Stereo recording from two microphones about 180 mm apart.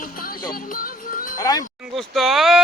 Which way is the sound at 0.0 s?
50° left (ahead or behind).